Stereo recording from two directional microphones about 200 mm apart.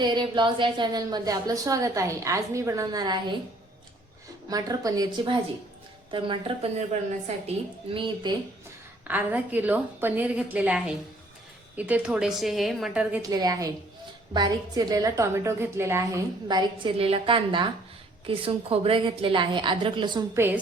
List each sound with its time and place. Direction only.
0.0 s a woman's voice: 20° right (ahead or behind)
4.4 s a woman's voice: 20° right (ahead or behind)
7.9 s a woman's voice: 25° right (ahead or behind)
9.0 s a woman's voice: 10° right (ahead or behind)
13.3 s a woman's voice: 20° right (ahead or behind)